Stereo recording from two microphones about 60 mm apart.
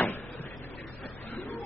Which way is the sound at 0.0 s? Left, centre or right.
Left.